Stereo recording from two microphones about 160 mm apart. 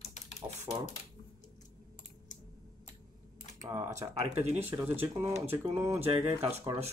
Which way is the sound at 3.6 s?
15° right (ahead or behind).